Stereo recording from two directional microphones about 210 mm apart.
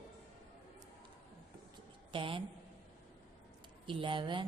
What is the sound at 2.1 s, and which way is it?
Speech, 25° right (ahead or behind).